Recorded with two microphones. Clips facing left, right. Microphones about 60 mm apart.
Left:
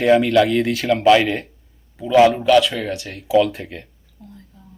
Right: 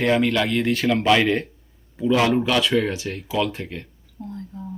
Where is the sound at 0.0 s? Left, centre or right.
Centre.